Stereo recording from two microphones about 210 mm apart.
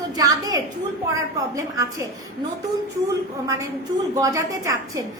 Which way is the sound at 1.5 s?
15° right (ahead or behind).